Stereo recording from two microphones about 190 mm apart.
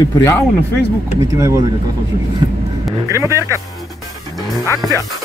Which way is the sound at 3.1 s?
15° right (ahead or behind).